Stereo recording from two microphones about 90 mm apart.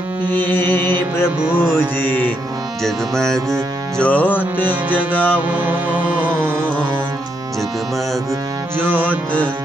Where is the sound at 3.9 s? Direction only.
15° left (ahead or behind).